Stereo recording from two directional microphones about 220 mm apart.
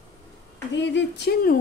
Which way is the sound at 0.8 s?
50° left (ahead or behind).